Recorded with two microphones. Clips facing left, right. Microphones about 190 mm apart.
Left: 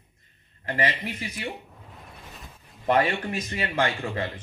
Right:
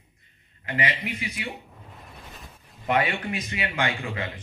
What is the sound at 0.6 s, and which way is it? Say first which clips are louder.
Speech: left 2 dB; 40° left (ahead or behind).